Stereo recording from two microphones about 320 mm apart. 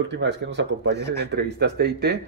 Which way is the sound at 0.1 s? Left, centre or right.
Right.